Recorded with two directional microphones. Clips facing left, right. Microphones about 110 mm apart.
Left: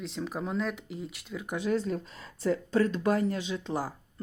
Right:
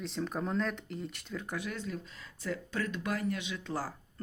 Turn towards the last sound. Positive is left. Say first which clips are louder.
# left 4 dB
turn(degrees=20)  # may be behind; listen again after turning